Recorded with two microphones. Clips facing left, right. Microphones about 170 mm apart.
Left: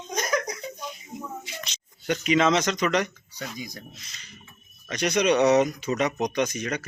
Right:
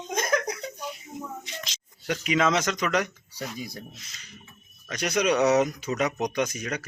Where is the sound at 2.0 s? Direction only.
5° right (ahead or behind).